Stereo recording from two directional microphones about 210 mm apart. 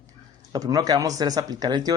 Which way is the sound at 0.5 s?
20° right (ahead or behind).